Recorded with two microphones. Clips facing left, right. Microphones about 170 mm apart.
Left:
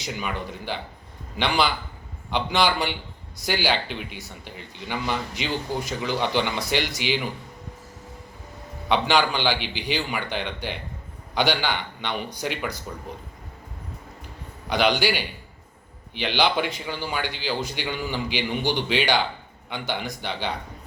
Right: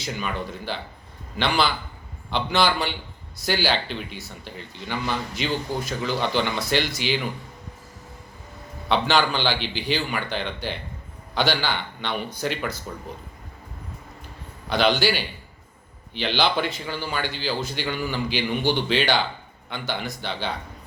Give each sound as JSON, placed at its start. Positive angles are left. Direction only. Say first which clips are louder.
{"t": 0.0, "sound": "speech", "louder": "right 1 dB", "side_deg": 15}
{"t": 8.9, "sound": "speech", "louder": "even", "side_deg": 15}
{"t": 14.7, "sound": "speech", "louder": "right 1 dB", "side_deg": 15}